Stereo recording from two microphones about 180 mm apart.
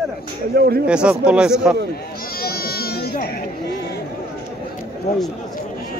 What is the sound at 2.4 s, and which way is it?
Sheep, 60° left (ahead or behind).